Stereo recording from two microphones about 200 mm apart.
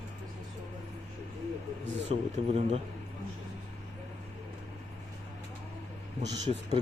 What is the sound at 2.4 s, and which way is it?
Speech, 30° right (ahead or behind).